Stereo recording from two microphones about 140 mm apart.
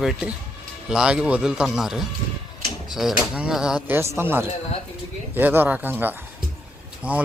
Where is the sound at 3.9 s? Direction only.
20° right (ahead or behind).